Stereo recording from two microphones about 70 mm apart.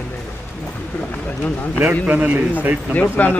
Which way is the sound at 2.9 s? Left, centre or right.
Left.